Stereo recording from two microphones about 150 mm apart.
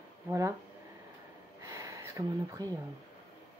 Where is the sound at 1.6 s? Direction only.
20° right (ahead or behind).